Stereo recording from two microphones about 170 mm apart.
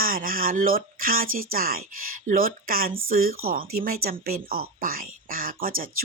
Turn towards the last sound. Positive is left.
turn(degrees=-55)  # may be behind; listen again after turning